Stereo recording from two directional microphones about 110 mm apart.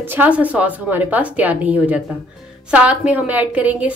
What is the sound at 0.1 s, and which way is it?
A woman's voice, 15° right (ahead or behind).